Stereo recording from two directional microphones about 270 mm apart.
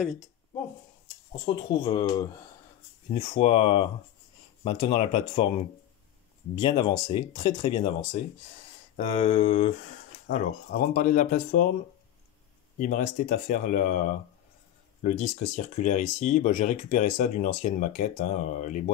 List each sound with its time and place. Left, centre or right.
1.0 s speech: centre
3.1 s speech: left
12.7 s speech: left